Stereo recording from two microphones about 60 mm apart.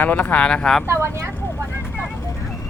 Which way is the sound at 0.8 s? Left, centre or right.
Right.